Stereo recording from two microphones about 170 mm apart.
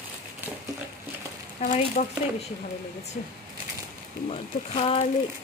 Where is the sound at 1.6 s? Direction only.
40° left (ahead or behind).